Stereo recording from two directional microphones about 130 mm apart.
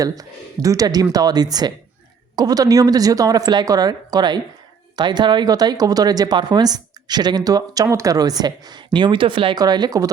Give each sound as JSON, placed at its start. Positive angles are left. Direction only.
{"t": 0.0, "sound": "speech", "side_deg": -25}